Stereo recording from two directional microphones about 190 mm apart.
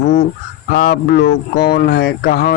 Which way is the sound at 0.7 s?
50° left (ahead or behind).